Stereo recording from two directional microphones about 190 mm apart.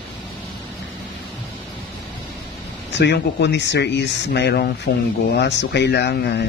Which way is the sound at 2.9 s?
65° left (ahead or behind).